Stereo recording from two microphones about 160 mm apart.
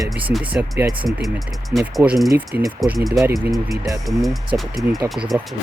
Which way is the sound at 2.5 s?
85° right.